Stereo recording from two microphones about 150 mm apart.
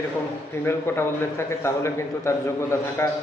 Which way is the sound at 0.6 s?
15° left (ahead or behind).